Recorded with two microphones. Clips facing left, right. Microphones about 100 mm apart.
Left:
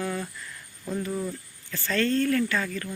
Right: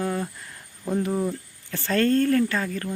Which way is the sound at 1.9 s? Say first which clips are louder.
Right 4 dB; 45° right (ahead or behind).